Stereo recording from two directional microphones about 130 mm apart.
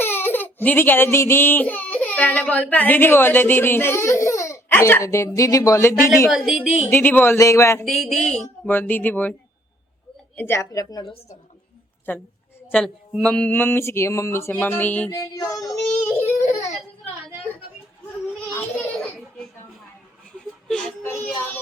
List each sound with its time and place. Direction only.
0.0 s speech: 15° left (ahead or behind)
6.3 s a woman's voice: 5° right (ahead or behind)
6.9 s speech: 15° left (ahead or behind)
7.9 s a woman's voice: centre (ahead or behind)
8.6 s speech: 15° left (ahead or behind)
10.3 s speech: 20° left (ahead or behind)
12.1 s speech: 15° left (ahead or behind)
15.1 s speech: 30° left (ahead or behind)
16.2 s baby cry: 20° left (ahead or behind)
20.7 s speech: 5° left (ahead or behind)
21.0 s speech: 15° left (ahead or behind)